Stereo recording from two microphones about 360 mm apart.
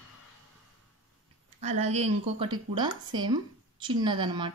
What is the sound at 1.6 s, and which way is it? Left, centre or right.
Speech, centre.